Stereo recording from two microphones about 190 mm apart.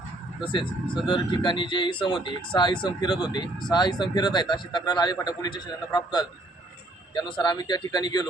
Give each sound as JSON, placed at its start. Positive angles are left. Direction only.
{"t": 0.4, "sound": "speech", "side_deg": 25}